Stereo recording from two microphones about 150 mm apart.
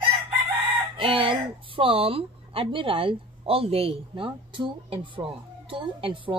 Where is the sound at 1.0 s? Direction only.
35° right (ahead or behind).